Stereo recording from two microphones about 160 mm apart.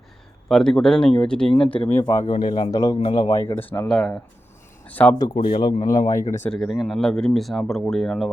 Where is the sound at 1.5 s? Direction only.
35° left (ahead or behind).